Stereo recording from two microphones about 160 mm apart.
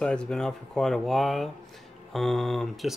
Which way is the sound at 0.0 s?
5° left (ahead or behind).